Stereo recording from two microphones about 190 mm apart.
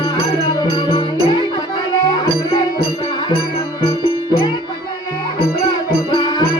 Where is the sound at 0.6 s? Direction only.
20° left (ahead or behind).